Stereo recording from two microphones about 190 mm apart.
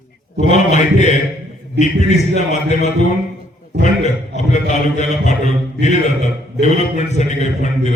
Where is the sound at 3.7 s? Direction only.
65° right (ahead or behind).